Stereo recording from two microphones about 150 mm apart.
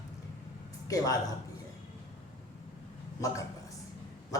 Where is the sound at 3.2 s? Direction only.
20° left (ahead or behind).